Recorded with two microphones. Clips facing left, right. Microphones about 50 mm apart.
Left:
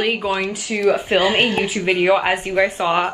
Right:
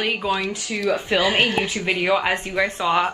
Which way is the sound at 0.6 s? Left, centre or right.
Left.